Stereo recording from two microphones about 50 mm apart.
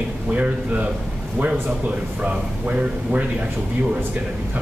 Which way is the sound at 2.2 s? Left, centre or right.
Right.